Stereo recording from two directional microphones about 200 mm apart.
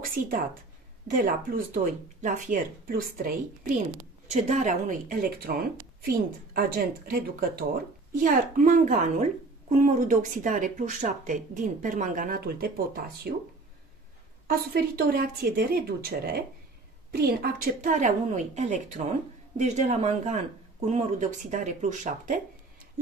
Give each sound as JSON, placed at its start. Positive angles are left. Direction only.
{"t": 0.0, "sound": "a woman's voice", "side_deg": -45}
{"t": 14.5, "sound": "a woman's voice", "side_deg": -50}